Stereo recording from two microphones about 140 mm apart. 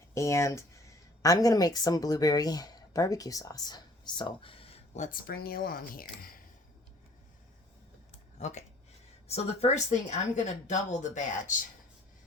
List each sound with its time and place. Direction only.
0.1 s speech: 20° left (ahead or behind); by 4.8 s 40° left (ahead or behind)
4.9 s speech: 75° left (ahead or behind)
8.4 s speech: 55° left (ahead or behind)